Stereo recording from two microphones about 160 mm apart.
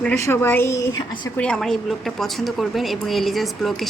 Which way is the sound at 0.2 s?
15° left (ahead or behind).